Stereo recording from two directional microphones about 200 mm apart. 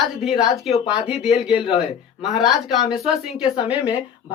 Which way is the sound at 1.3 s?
30° left (ahead or behind).